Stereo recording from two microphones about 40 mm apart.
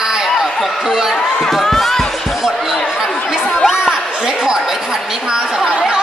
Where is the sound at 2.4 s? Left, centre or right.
Centre.